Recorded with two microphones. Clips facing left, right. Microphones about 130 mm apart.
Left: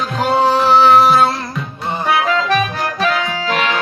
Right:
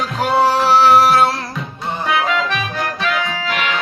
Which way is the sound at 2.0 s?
35° left (ahead or behind).